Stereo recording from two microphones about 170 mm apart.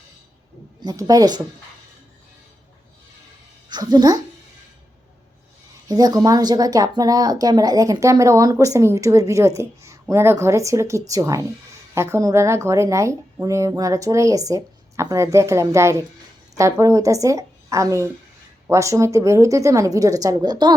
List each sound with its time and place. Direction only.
0.8 s speech: 20° right (ahead or behind)
3.7 s speech: 25° right (ahead or behind)
5.9 s speech: 20° right (ahead or behind)